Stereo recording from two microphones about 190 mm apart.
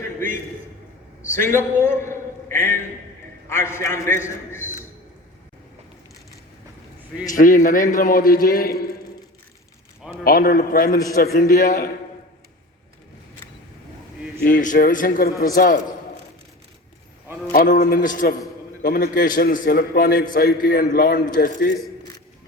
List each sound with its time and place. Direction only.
1.9 s a man's voice: 15° left (ahead or behind)
7.3 s a man's voice: 45° left (ahead or behind)
10.2 s a man's voice: 50° left (ahead or behind)
14.4 s a man's voice: 45° left (ahead or behind)
17.5 s a man's voice: 45° left (ahead or behind)